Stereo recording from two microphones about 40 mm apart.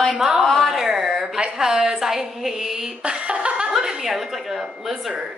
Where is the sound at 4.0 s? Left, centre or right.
Centre.